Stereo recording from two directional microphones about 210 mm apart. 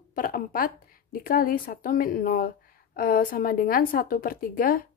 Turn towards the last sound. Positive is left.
turn(degrees=40)  # may be behind; listen again after turning